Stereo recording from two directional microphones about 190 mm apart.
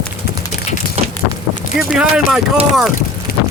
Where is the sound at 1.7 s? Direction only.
5° right (ahead or behind).